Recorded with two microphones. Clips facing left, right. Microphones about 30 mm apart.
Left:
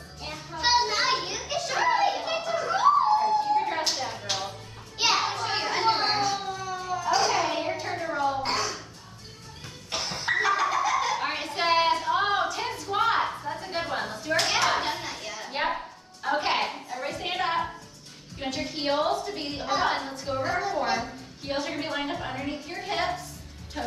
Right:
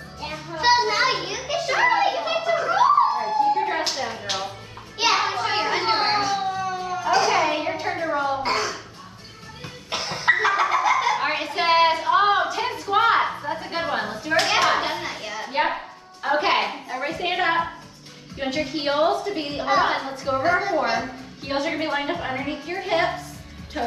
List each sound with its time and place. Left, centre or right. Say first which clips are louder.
0.2 s child singing: right 5 dB; right
0.6 s children playing: right 5 dB; centre
5.2 s music: right 5 dB; right
6.2 s cat: right 5 dB; right
7.2 s a sound: right 5 dB; right
9.8 s snicker: right 7 dB; right
18.4 s a sound: right 6 dB; right
21.5 s a woman's voice: right 7 dB; right